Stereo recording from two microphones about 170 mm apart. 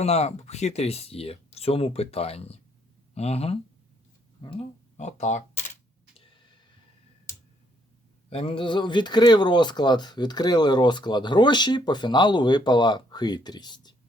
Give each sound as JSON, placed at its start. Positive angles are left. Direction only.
{"t": 0.0, "sound": "speech", "side_deg": 40}
{"t": 6.1, "sound": "a sound", "side_deg": 30}
{"t": 8.3, "sound": "speech", "side_deg": 35}